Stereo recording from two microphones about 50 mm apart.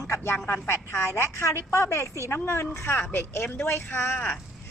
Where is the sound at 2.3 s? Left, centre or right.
Left.